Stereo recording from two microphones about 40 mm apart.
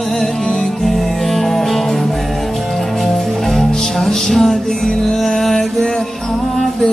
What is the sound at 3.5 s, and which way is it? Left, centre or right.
Music, centre.